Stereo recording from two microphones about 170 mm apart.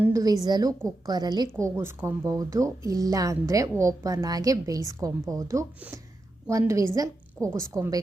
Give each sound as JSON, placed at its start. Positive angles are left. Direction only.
{"t": 0.0, "sound": "speech", "side_deg": -20}
{"t": 0.7, "sound": "a woman's voice", "side_deg": 5}
{"t": 1.0, "sound": "speech", "side_deg": -25}